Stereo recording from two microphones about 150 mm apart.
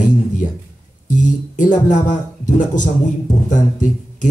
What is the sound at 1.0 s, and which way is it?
Speech, 60° left (ahead or behind).